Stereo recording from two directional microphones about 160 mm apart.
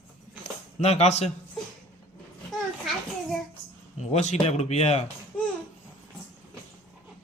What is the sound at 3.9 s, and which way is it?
Speech, 45° left (ahead or behind).